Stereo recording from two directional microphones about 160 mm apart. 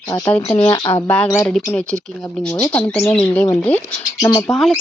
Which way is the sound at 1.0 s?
15° left (ahead or behind).